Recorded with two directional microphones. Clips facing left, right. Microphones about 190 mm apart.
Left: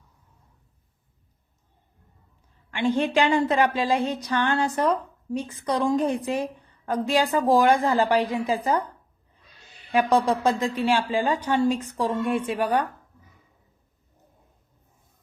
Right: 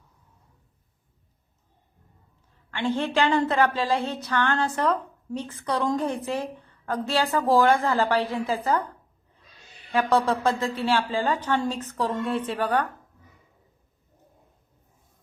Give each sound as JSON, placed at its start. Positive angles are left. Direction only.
{"t": 2.6, "sound": "a woman's voice", "side_deg": 15}
{"t": 9.9, "sound": "a woman's voice", "side_deg": 15}